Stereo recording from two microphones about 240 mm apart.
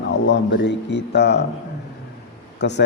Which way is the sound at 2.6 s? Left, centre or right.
Left.